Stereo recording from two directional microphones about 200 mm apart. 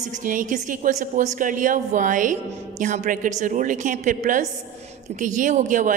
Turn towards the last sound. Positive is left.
turn(degrees=-40)  # may be behind; listen again after turning